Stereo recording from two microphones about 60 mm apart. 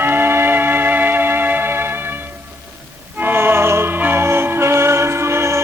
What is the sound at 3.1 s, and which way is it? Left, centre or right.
Music, right.